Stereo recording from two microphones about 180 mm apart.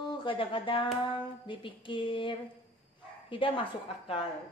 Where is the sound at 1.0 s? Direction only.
25° left (ahead or behind).